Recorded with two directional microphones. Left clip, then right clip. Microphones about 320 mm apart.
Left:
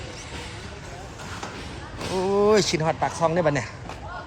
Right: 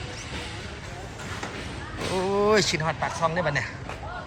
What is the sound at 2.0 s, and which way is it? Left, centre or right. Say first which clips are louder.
Speech: left 2 dB; centre.